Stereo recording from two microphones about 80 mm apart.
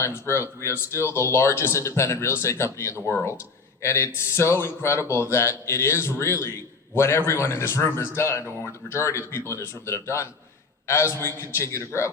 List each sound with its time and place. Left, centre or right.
0.0 s a man's voice: left